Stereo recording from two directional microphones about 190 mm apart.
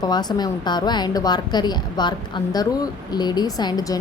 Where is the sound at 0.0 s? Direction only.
20° left (ahead or behind).